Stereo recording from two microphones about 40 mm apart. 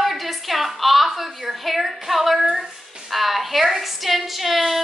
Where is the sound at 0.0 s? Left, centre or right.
Centre.